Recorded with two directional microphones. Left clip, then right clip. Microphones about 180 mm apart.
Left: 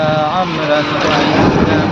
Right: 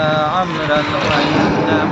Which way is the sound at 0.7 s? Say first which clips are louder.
Left 1 dB; 60° left (ahead or behind).